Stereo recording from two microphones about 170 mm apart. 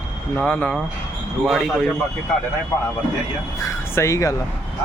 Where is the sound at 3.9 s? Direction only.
15° left (ahead or behind).